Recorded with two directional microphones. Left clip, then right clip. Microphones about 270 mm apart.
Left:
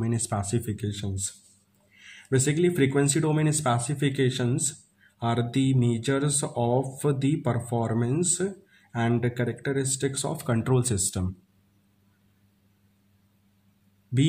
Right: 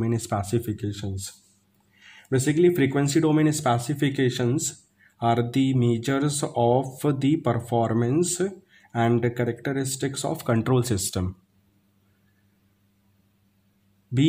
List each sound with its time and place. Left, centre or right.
0.0 s speech: centre